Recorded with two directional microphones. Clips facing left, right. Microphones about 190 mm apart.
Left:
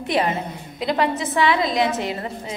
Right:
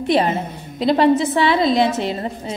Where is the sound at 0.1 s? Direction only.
30° right (ahead or behind).